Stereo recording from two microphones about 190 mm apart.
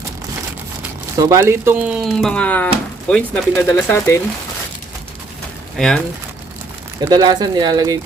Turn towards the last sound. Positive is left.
turn(degrees=-20)  # may be behind; listen again after turning